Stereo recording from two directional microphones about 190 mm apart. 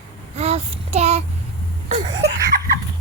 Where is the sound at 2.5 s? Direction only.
45° right (ahead or behind).